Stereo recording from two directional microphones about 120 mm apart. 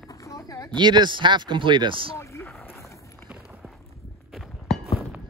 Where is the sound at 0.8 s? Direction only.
40° right (ahead or behind).